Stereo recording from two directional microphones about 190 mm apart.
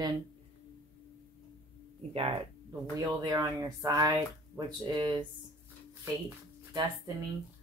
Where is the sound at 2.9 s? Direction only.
20° right (ahead or behind).